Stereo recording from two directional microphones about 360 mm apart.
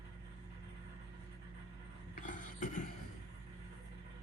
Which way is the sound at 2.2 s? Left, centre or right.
Left.